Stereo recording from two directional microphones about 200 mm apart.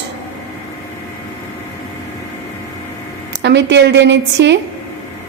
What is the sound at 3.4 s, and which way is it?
A woman's voice, 60° right (ahead or behind).